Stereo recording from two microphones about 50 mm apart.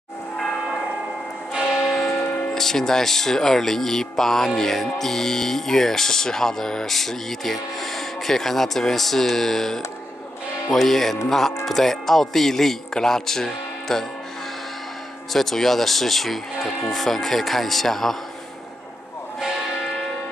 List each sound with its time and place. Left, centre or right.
0.4 s church bell: centre
1.9 s church bell: centre
2.2 s music: left
2.5 s speech: centre
15.3 s speech: centre